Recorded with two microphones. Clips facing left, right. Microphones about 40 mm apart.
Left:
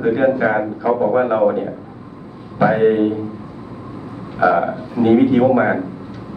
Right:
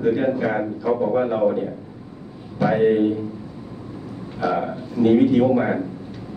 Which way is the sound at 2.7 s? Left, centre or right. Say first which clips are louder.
Left 1 dB; centre.